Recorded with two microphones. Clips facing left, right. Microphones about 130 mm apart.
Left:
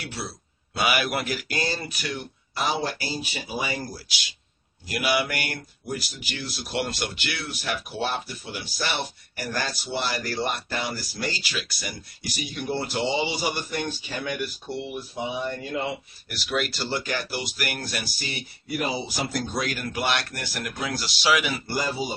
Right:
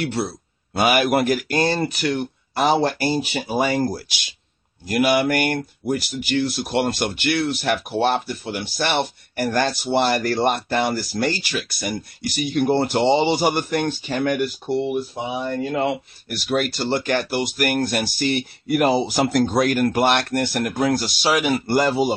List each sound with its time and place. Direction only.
0.0 s speech: 55° right (ahead or behind)
16.3 s speech: 45° right (ahead or behind); by 22.1 s 70° right (ahead or behind)